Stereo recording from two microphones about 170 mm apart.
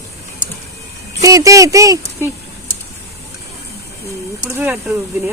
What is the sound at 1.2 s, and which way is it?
Speech, 20° right (ahead or behind).